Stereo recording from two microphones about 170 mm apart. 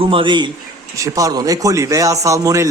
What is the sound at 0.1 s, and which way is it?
Speech, 30° right (ahead or behind).